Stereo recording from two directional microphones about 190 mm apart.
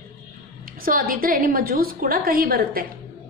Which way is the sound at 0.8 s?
50° right (ahead or behind).